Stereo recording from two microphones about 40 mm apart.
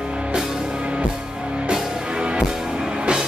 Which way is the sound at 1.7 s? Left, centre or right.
Right.